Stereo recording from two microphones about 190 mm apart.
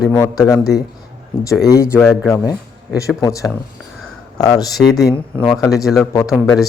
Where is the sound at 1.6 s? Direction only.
15° left (ahead or behind).